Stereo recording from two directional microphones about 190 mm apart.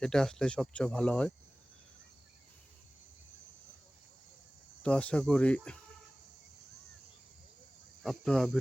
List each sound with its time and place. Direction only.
0.0 s speech: 5° left (ahead or behind)
4.8 s speech: 5° left (ahead or behind)
8.0 s speech: 5° left (ahead or behind)